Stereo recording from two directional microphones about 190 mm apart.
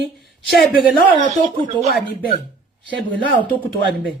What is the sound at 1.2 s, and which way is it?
Speech, 25° right (ahead or behind).